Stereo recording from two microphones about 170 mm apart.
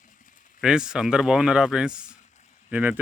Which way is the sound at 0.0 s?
50° left (ahead or behind).